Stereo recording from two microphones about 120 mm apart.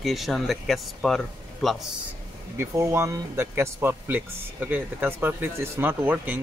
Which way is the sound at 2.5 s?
20° right (ahead or behind).